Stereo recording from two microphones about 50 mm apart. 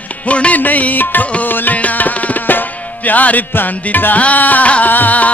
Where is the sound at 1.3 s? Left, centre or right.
Left.